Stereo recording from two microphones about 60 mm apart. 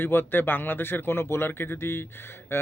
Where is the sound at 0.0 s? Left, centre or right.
Left.